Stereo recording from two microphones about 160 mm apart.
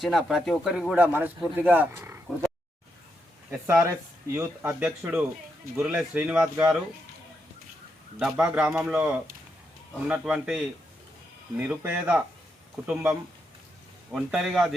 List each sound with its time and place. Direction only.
0.0 s speech: centre (ahead or behind)
3.5 s speech: 15° right (ahead or behind)
8.2 s speech: 5° right (ahead or behind)